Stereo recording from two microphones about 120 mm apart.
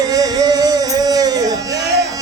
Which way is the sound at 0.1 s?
30° right (ahead or behind).